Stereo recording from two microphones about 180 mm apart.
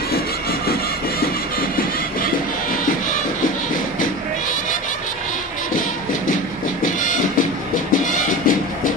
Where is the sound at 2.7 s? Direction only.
50° left (ahead or behind).